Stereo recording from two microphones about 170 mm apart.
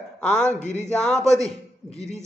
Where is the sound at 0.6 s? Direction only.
45° left (ahead or behind).